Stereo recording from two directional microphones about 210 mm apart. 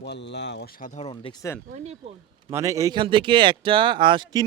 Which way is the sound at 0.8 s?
35° left (ahead or behind).